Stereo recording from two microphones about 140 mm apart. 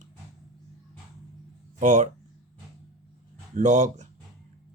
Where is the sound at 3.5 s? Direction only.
60° right (ahead or behind).